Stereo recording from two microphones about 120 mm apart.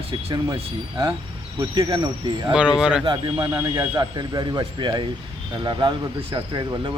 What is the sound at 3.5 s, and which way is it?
Speech, 25° right (ahead or behind).